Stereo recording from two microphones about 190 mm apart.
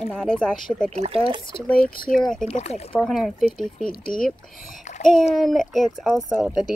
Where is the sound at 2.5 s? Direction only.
35° left (ahead or behind).